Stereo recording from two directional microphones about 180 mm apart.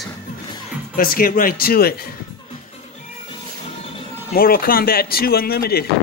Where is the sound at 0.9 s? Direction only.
55° left (ahead or behind).